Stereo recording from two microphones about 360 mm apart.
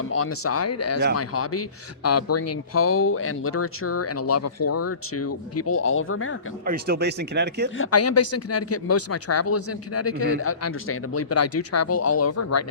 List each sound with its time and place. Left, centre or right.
0.2 s speech: left
6.7 s speech: right
7.8 s speech: left